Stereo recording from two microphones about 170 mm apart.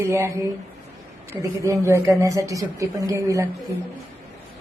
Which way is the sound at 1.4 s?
20° right (ahead or behind).